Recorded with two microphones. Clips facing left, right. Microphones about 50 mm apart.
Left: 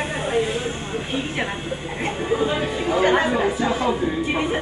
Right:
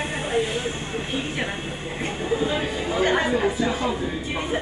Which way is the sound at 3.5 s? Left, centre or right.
Left.